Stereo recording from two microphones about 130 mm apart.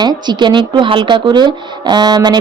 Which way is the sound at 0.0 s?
35° right (ahead or behind).